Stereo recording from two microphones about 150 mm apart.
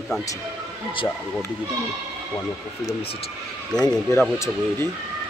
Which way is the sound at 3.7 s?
25° left (ahead or behind).